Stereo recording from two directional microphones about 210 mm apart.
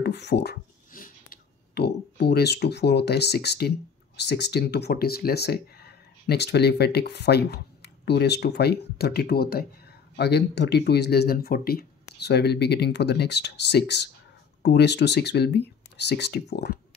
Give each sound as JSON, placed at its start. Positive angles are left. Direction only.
{"t": 0.0, "sound": "speech", "side_deg": 55}